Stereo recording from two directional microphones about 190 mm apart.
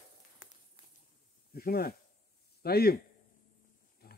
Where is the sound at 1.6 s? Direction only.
55° left (ahead or behind).